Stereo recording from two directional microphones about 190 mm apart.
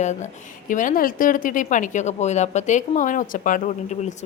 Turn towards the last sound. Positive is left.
turn(degrees=40)  # may be behind; listen again after turning